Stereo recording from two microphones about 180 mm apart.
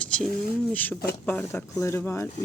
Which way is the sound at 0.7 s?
10° left (ahead or behind).